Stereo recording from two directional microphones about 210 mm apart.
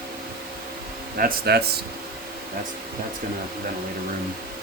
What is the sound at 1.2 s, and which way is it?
Speech, 45° right (ahead or behind).